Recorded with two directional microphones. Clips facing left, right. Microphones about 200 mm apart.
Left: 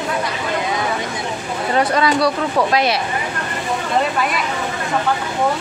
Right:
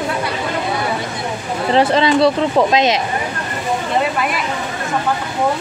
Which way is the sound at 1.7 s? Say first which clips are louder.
Right 3 dB; 25° right (ahead or behind).